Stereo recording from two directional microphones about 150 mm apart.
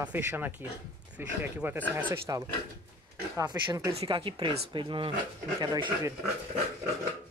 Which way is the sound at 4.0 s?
35° right (ahead or behind).